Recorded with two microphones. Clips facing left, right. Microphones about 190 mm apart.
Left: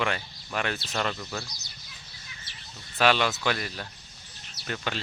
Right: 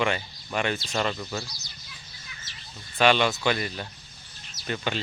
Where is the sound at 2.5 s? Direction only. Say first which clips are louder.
Right 1 dB; 60° left (ahead or behind).